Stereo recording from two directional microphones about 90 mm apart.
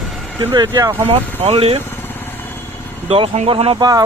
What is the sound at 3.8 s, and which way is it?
Speech, 45° right (ahead or behind).